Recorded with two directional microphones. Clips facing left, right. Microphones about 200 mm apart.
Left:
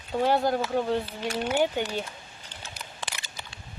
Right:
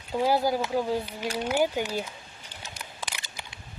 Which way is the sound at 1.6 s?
5° right (ahead or behind).